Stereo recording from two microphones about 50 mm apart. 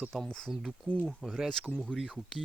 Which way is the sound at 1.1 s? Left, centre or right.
Centre.